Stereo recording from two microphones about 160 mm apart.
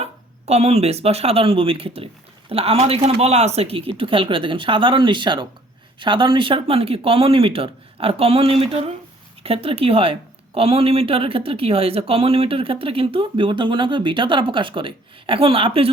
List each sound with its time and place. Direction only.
0.0 s a woman's voice: 40° right (ahead or behind)